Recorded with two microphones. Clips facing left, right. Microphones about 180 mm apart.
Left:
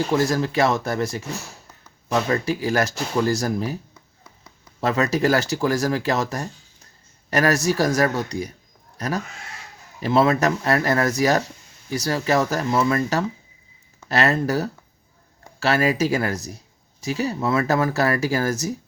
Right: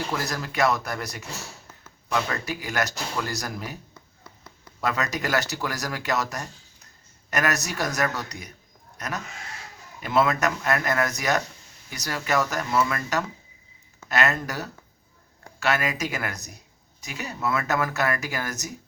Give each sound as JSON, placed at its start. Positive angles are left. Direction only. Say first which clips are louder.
{"t": 0.1, "sound": "speech", "louder": "left 10 dB", "side_deg": 30}
{"t": 2.3, "sound": "speech", "louder": "left 8 dB", "side_deg": 30}
{"t": 4.8, "sound": "speech", "louder": "left 7 dB", "side_deg": 30}